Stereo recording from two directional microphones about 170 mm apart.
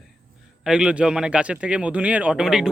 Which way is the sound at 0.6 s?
5° right (ahead or behind).